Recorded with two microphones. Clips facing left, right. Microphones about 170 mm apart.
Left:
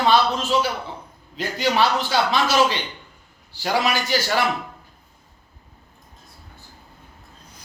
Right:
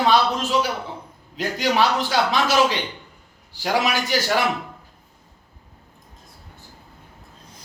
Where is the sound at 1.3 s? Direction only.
15° right (ahead or behind).